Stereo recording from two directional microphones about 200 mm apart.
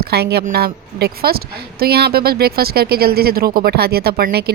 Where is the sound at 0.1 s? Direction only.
55° right (ahead or behind).